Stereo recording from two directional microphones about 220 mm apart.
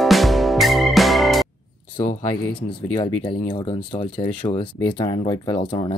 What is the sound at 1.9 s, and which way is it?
Speech, 20° left (ahead or behind).